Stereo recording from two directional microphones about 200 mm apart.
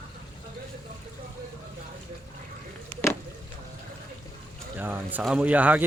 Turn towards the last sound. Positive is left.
turn(degrees=-10)  # may be behind; listen again after turning